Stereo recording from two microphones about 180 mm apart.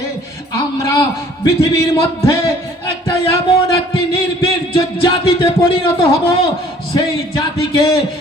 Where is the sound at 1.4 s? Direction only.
15° left (ahead or behind).